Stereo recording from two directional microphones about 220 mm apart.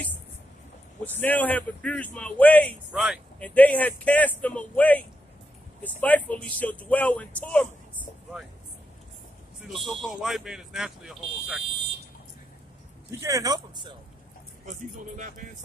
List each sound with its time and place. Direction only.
1.0 s speech: 10° left (ahead or behind)
9.7 s speech: centre (ahead or behind)
13.2 s speech: 15° right (ahead or behind)
14.7 s a man's voice: 35° right (ahead or behind)